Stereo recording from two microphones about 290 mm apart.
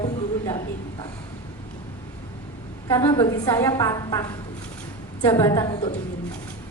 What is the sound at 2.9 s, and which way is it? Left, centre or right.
A woman's voice, centre.